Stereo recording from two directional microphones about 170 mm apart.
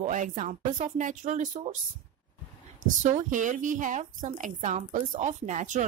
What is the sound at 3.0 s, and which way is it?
Speech, 45° right (ahead or behind).